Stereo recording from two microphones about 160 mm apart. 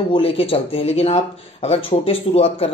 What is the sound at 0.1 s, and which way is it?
Speech, 35° left (ahead or behind).